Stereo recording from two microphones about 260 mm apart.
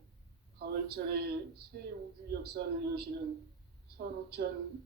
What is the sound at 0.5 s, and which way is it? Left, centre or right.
Speech, right.